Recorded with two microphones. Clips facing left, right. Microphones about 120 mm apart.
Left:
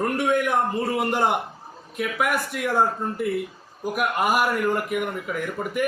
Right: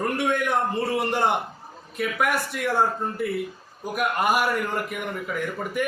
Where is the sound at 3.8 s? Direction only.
5° left (ahead or behind).